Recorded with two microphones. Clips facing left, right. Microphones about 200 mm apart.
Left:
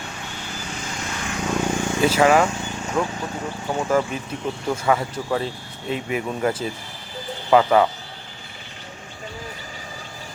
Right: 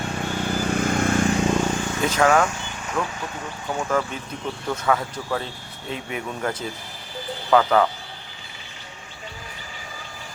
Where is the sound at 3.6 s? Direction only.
15° left (ahead or behind).